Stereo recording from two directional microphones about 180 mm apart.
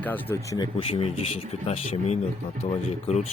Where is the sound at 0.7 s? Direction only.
30° left (ahead or behind).